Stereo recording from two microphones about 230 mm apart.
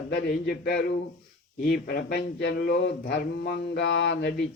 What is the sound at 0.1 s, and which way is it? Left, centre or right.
Speech, left.